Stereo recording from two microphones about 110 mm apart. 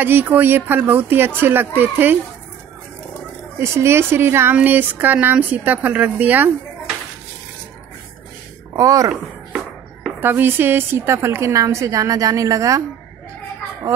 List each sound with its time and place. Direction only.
0.0 s a woman's voice: 15° right (ahead or behind)
3.5 s a woman's voice: 25° right (ahead or behind)
8.7 s speech: 30° right (ahead or behind)
9.1 s chopping: centre (ahead or behind)
10.2 s a woman's voice: 20° right (ahead or behind)